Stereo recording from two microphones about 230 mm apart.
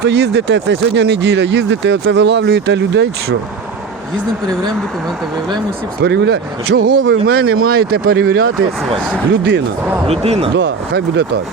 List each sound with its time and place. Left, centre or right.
0.0 s speech: right
6.0 s speech: right
10.1 s speech: right
10.6 s speech: right